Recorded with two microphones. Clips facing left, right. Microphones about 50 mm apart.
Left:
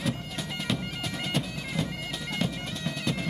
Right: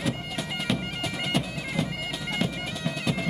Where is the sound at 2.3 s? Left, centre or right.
Centre.